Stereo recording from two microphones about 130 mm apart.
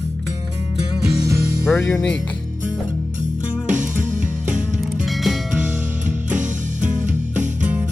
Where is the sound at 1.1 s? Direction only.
25° right (ahead or behind).